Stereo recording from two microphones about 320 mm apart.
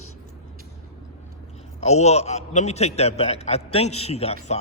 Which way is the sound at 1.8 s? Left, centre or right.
Centre.